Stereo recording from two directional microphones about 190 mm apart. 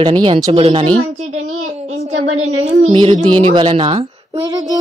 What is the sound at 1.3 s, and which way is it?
Speech, 90° right.